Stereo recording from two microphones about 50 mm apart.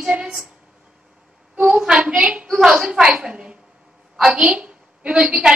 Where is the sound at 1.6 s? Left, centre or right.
Centre.